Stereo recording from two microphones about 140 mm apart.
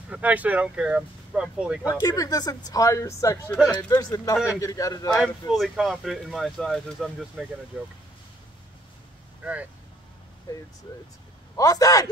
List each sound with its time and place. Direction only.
0.1 s speech: 10° right (ahead or behind)
1.9 s speech: 25° left (ahead or behind)
5.5 s speech: centre (ahead or behind)
9.4 s speech: 10° right (ahead or behind)
11.5 s speech: 25° left (ahead or behind)